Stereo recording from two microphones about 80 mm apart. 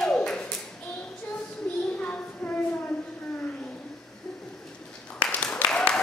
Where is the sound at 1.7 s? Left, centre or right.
Centre.